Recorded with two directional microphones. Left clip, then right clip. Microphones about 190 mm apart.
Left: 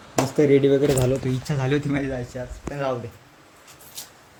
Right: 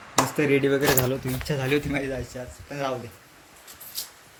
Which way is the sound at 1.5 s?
10° left (ahead or behind).